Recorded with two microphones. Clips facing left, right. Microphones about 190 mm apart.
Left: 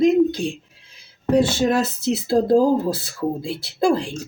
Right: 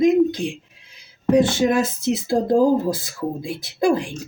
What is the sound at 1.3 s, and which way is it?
A man's voice, 15° right (ahead or behind).